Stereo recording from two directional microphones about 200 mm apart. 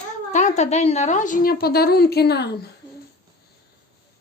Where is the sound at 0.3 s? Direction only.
35° left (ahead or behind); by 2.6 s 55° left (ahead or behind).